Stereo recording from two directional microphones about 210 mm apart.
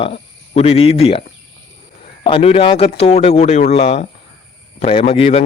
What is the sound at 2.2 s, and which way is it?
A man's voice, 25° left (ahead or behind).